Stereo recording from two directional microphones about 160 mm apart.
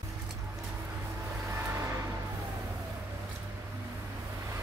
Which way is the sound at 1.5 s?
15° right (ahead or behind).